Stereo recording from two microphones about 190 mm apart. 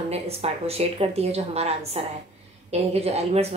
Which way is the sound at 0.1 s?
30° right (ahead or behind).